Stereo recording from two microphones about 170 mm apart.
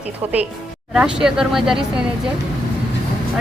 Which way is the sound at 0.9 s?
5° right (ahead or behind).